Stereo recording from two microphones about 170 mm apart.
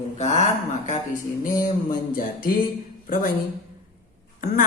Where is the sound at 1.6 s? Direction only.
55° left (ahead or behind).